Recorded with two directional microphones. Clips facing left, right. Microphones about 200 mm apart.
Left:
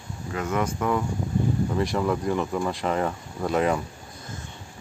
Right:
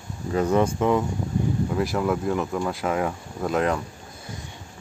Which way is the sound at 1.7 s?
5° right (ahead or behind).